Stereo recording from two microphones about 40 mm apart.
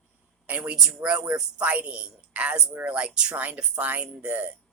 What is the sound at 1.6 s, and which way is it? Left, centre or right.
A woman's voice, right.